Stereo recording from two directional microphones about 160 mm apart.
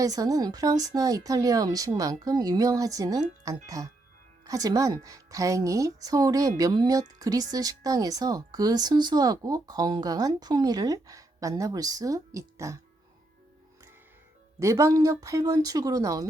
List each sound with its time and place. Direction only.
0.0 s speech: 20° right (ahead or behind)
14.6 s speech: 20° right (ahead or behind)